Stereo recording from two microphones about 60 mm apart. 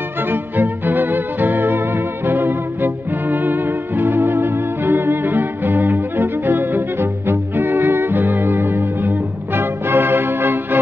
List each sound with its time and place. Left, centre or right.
0.2 s music: right